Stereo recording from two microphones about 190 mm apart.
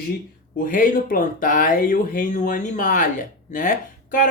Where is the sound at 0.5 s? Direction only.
45° left (ahead or behind).